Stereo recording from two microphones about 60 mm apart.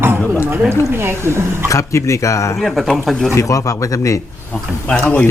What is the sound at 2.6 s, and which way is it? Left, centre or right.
Speech, centre.